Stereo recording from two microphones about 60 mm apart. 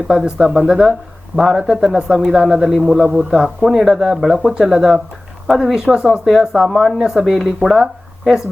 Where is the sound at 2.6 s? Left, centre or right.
Centre.